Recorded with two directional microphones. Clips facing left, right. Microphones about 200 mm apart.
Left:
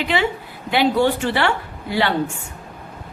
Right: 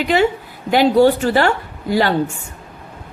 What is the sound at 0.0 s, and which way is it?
A woman's voice, 40° right (ahead or behind).